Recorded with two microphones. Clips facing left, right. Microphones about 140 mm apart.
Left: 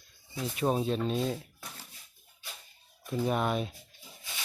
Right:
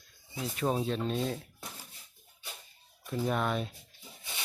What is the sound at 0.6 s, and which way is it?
Speech, 10° left (ahead or behind).